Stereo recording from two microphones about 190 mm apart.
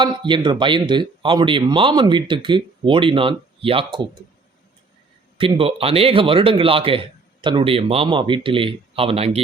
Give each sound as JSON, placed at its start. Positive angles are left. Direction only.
{"t": 0.0, "sound": "speech", "side_deg": -25}
{"t": 5.4, "sound": "speech", "side_deg": -25}